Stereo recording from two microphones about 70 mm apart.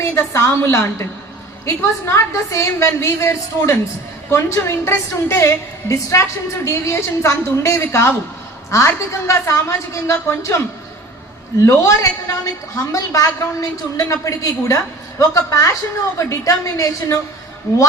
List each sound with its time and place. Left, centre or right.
0.0 s a woman's voice: left
11.6 s a woman's voice: left
11.9 s a woman's voice: left